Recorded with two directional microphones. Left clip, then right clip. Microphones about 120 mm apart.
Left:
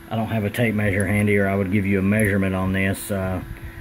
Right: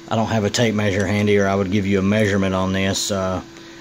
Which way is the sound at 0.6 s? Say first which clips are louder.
Left 1 dB; 25° right (ahead or behind).